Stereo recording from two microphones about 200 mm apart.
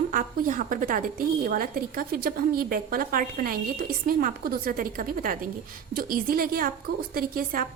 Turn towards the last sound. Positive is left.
turn(degrees=-45)  # may be behind; listen again after turning